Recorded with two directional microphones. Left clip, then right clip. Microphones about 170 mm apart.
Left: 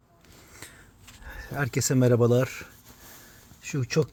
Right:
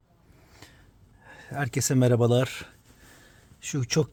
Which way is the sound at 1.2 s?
Centre (ahead or behind).